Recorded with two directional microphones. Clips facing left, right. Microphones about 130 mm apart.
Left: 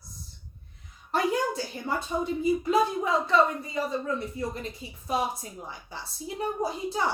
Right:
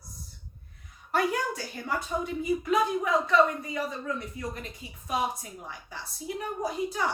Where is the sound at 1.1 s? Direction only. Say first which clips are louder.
Left 1 dB; 30° left (ahead or behind).